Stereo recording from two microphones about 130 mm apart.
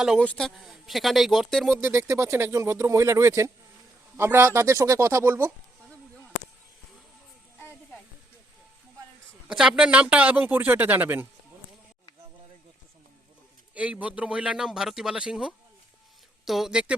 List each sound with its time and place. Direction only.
0.2 s speech: 5° left (ahead or behind)
1.7 s speech: 20° right (ahead or behind)
9.5 s a man's voice: 5° right (ahead or behind)
13.7 s a man's voice: 10° right (ahead or behind)